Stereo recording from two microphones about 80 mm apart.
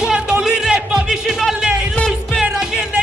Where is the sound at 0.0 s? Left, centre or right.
Centre.